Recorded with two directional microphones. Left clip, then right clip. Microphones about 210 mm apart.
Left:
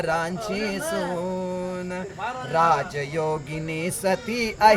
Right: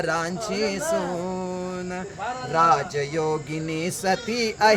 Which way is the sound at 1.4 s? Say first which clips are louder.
Left 1 dB; 5° right (ahead or behind).